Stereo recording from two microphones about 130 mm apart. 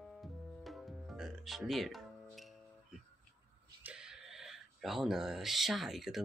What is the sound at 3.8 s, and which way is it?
Speech, 5° right (ahead or behind).